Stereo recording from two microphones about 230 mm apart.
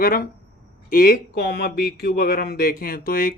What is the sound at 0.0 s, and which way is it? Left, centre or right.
Speech, left.